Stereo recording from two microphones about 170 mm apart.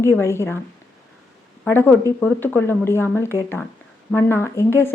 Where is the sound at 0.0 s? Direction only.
15° left (ahead or behind).